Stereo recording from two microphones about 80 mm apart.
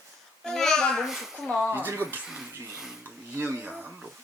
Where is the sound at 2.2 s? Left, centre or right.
Centre.